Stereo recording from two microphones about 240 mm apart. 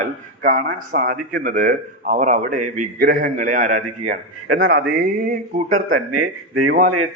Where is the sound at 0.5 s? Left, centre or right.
Right.